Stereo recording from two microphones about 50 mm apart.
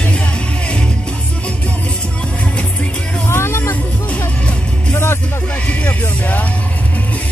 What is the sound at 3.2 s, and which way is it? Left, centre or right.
Vehicle, left.